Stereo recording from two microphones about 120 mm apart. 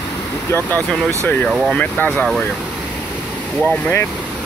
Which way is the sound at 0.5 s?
20° left (ahead or behind).